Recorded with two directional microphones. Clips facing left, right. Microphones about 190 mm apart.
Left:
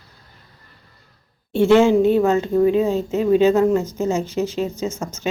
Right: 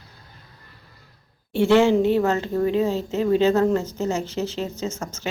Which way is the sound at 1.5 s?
20° left (ahead or behind).